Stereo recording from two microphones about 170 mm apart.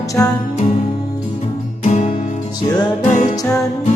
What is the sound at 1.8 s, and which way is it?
Music, 45° left (ahead or behind).